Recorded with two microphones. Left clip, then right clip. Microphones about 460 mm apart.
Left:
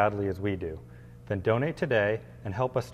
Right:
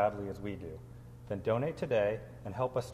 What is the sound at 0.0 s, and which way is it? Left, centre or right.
A woman's voice, left.